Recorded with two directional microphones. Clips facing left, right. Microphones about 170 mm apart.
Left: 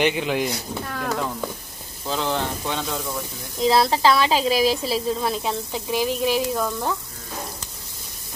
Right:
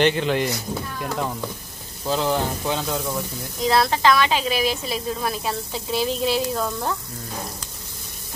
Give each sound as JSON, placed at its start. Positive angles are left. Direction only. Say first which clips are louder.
{"t": 0.0, "sound": "frying", "louder": "right 2 dB", "side_deg": 10}
{"t": 2.0, "sound": "speech", "louder": "right 3 dB", "side_deg": -5}
{"t": 3.6, "sound": "a woman's voice", "louder": "left 1 dB", "side_deg": 25}
{"t": 5.4, "sound": "frying", "louder": "left 1 dB", "side_deg": 15}
{"t": 6.6, "sound": "speech", "louder": "left 1 dB", "side_deg": 0}